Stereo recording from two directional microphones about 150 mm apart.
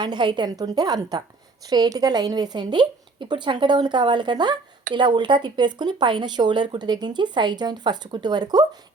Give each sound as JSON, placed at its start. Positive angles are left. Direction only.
{"t": 0.0, "sound": "speech", "side_deg": -30}